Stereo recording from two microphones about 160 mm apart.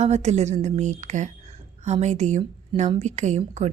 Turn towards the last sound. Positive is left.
turn(degrees=-50)  # may be behind; listen again after turning